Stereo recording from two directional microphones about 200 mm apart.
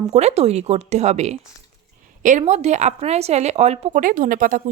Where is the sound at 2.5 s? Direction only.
35° right (ahead or behind).